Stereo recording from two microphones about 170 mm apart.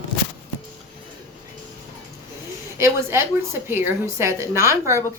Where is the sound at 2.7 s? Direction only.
15° right (ahead or behind).